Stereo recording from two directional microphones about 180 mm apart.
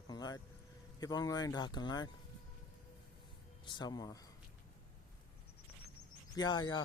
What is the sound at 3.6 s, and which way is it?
Speech, 25° left (ahead or behind).